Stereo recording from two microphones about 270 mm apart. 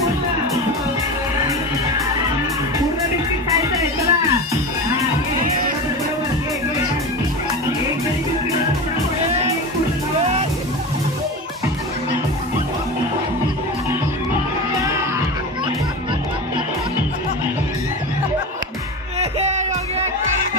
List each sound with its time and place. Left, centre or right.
3.8 s music: centre
19.1 s music: right